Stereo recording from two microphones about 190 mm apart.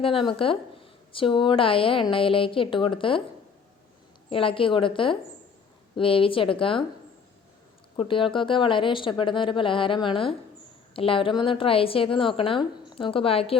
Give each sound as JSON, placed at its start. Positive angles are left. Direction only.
{"t": 0.0, "sound": "speech", "side_deg": 25}
{"t": 4.3, "sound": "speech", "side_deg": 30}
{"t": 7.9, "sound": "speech", "side_deg": 25}